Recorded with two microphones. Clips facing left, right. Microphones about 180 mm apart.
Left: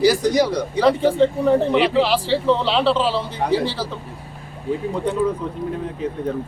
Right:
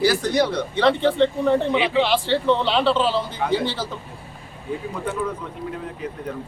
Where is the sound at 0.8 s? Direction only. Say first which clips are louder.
Left 2 dB; 5° left (ahead or behind).